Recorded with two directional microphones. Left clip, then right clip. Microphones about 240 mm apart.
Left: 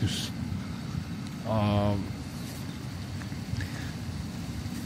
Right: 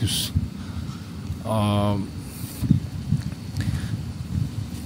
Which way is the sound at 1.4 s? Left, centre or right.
Right.